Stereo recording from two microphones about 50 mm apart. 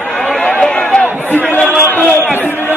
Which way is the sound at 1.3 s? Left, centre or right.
Left.